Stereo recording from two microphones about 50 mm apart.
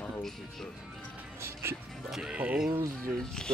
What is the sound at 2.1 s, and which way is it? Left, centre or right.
Speech, centre.